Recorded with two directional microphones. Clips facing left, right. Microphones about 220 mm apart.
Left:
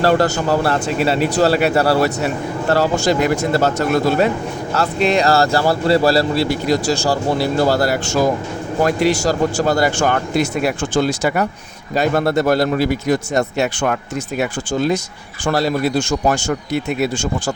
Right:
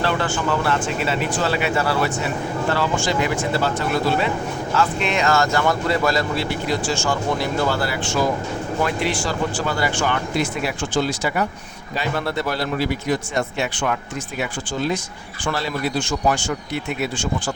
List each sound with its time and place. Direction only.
0.0 s speech: 40° left (ahead or behind)